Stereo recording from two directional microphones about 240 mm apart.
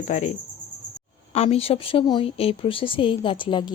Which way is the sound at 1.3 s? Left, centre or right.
Left.